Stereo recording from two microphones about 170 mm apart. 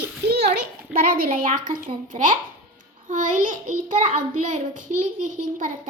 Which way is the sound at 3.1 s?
50° right (ahead or behind).